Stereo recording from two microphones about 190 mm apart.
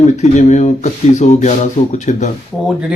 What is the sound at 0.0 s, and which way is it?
Speech, 35° left (ahead or behind).